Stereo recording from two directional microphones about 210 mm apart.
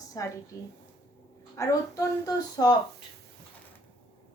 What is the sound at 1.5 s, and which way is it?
A woman's voice, 15° left (ahead or behind).